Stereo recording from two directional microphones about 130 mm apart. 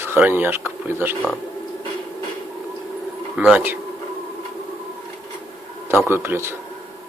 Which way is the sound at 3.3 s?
5° right (ahead or behind).